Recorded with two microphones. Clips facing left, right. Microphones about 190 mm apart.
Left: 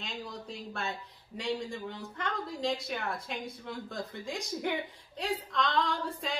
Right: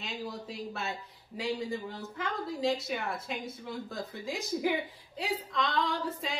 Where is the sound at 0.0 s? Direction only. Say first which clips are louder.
Right 2 dB; 5° right (ahead or behind).